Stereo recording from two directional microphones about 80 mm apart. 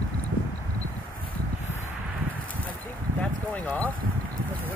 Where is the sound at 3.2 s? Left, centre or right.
Centre.